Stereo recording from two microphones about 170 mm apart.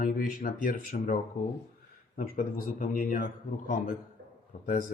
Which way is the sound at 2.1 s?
55° left (ahead or behind).